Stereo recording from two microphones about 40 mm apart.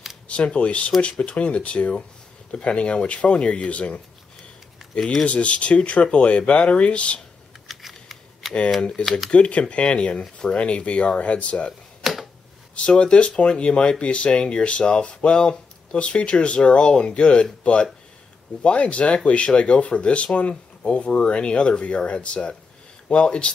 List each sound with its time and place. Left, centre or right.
0.3 s speech: left
5.2 s speech: left
7.6 s computer keyboard: centre
9.0 s speech: left
12.0 s a sound: centre
12.7 s speech: left